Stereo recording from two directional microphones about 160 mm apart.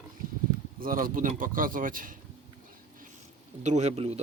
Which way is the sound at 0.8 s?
60° right (ahead or behind).